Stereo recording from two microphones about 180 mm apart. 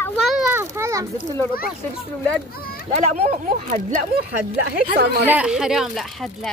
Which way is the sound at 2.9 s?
40° right (ahead or behind).